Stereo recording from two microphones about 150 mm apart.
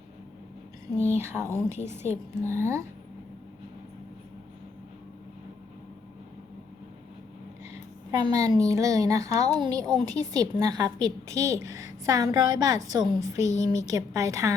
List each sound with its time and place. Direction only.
1.2 s speech: 15° right (ahead or behind)
1.7 s a woman's voice: 50° left (ahead or behind)
2.4 s a woman's voice: 20° right (ahead or behind)
8.3 s a woman's voice: 20° right (ahead or behind)